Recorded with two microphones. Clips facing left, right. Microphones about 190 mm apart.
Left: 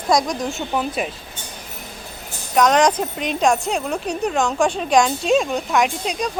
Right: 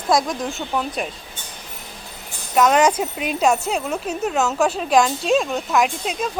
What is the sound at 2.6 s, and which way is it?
A woman's voice, 5° right (ahead or behind).